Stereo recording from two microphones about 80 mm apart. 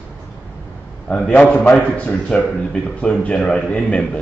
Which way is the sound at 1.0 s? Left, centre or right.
Centre.